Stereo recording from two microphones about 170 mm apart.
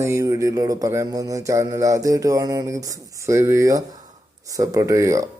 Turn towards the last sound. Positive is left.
turn(degrees=-20)  # may be behind; listen again after turning